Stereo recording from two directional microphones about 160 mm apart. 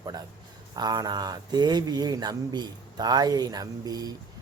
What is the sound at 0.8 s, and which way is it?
Speech, 25° right (ahead or behind).